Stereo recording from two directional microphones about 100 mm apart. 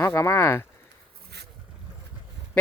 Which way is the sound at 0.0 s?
25° left (ahead or behind).